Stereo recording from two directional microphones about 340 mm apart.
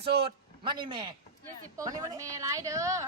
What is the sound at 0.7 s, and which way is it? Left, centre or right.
Speech, centre.